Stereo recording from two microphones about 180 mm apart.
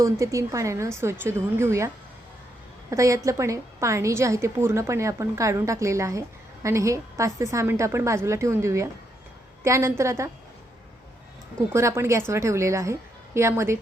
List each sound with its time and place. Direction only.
0.0 s a woman's voice: 15° right (ahead or behind)
2.9 s a woman's voice: 15° right (ahead or behind)
11.7 s a woman's voice: 15° right (ahead or behind)